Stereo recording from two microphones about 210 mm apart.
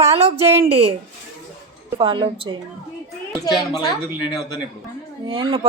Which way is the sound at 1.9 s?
25° right (ahead or behind).